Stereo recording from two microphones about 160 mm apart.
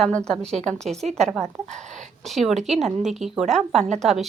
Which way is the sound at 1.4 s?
40° right (ahead or behind).